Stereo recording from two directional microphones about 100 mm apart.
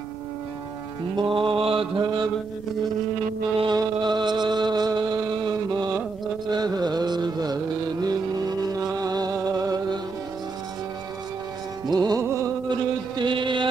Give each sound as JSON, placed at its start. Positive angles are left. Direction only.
{"t": 1.1, "sound": "music", "side_deg": -55}
{"t": 2.0, "sound": "mantra", "side_deg": -50}
{"t": 3.7, "sound": "music", "side_deg": -50}
{"t": 6.5, "sound": "carnatic music", "side_deg": -45}
{"t": 11.8, "sound": "music", "side_deg": -40}
{"t": 12.2, "sound": "a sound", "side_deg": -30}
{"t": 12.6, "sound": "chant", "side_deg": -50}